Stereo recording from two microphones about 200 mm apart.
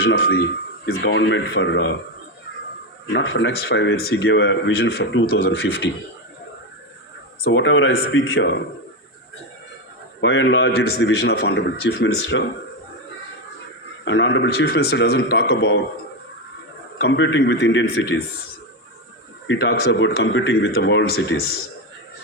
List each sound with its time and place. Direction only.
0.0 s speech: 55° left (ahead or behind)
0.9 s speech: 65° left (ahead or behind)
3.1 s speech: 65° left (ahead or behind)
7.4 s a man's voice: 65° left (ahead or behind)
10.2 s speech: 65° left (ahead or behind)
14.0 s speech: 65° left (ahead or behind)
17.0 s speech: 60° left (ahead or behind)
19.5 s speech: 65° left (ahead or behind)